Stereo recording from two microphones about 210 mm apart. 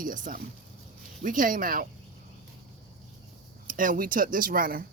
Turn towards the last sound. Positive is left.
turn(degrees=-45)  # may be behind; listen again after turning